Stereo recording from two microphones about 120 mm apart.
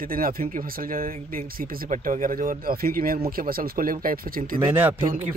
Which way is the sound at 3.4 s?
90° right.